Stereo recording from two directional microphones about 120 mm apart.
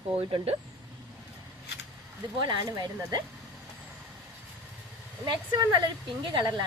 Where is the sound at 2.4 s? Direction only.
40° right (ahead or behind).